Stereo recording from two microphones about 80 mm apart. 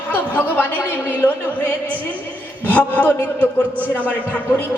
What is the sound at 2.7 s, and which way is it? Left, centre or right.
Speech, centre.